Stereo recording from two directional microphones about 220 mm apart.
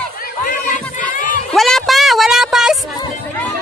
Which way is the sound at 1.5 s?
Centre (ahead or behind).